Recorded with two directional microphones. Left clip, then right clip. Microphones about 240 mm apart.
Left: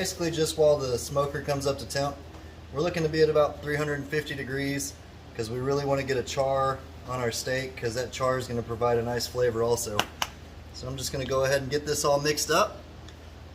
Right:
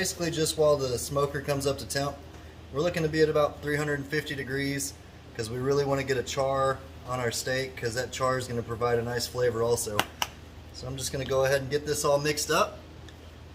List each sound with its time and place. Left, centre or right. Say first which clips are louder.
0.0 s speech: left 1 dB; centre